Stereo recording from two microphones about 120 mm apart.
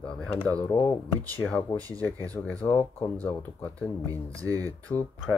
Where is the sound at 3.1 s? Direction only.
15° left (ahead or behind).